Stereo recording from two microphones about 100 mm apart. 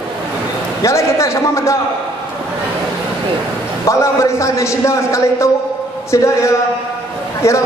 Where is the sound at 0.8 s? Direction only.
30° left (ahead or behind).